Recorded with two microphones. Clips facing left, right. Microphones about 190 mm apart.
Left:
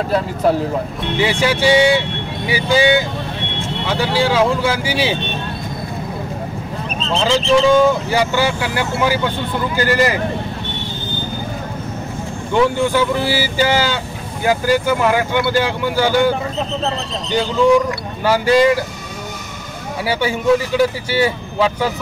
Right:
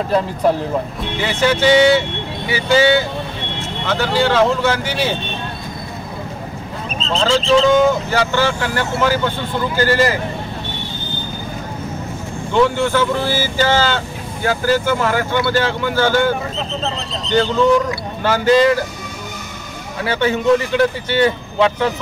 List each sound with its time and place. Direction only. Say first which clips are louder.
1.2 s speech: even; 10° left (ahead or behind)
7.2 s speech: even; 10° left (ahead or behind)
12.5 s speech: even; 15° left (ahead or behind)
20.0 s speech: right 2 dB; 10° left (ahead or behind)